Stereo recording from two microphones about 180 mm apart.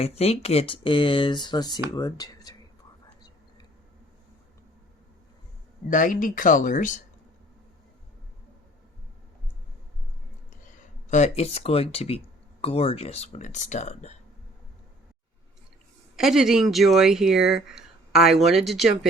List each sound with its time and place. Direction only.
0.0 s speech: 35° left (ahead or behind)
5.9 s speech: 45° left (ahead or behind)
11.1 s speech: 40° left (ahead or behind)
16.1 s speech: centre (ahead or behind)